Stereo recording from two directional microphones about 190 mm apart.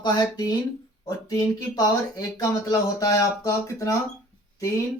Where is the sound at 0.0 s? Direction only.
20° left (ahead or behind).